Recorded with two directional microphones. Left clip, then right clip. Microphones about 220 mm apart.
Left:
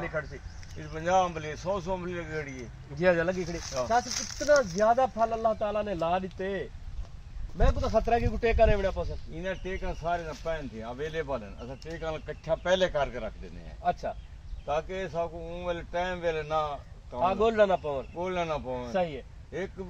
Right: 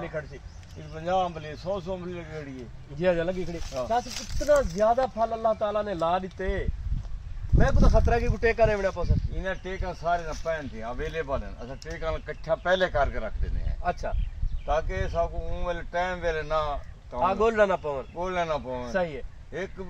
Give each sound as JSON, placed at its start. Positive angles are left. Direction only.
{"t": 0.9, "sound": "speech", "side_deg": 10}
{"t": 3.0, "sound": "speech", "side_deg": -10}
{"t": 9.4, "sound": "speech", "side_deg": 15}
{"t": 14.7, "sound": "speech", "side_deg": 10}
{"t": 17.2, "sound": "speech", "side_deg": -5}
{"t": 18.2, "sound": "speech", "side_deg": 10}
{"t": 18.9, "sound": "speech", "side_deg": 0}